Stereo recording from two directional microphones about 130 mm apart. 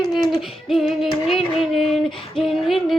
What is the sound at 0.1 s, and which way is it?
Female singing, centre (ahead or behind).